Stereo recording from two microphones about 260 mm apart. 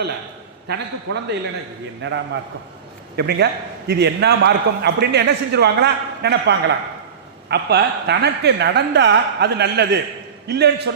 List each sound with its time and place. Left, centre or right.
0.7 s a man's voice: right